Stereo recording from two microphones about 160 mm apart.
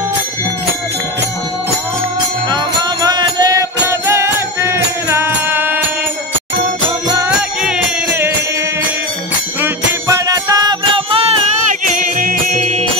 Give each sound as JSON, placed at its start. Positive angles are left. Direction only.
{"t": 2.5, "sound": "music", "side_deg": -25}
{"t": 7.2, "sound": "music", "side_deg": -10}
{"t": 9.6, "sound": "music", "side_deg": -20}
{"t": 12.2, "sound": "music", "side_deg": -60}